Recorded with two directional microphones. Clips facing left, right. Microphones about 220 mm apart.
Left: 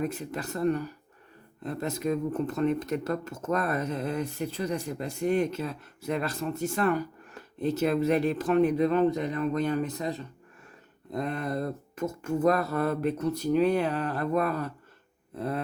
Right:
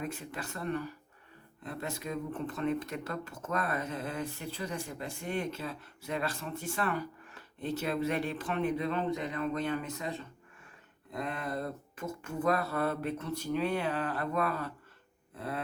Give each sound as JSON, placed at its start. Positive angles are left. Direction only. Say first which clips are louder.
{"t": 0.0, "sound": "speech", "louder": "left 7 dB", "side_deg": 40}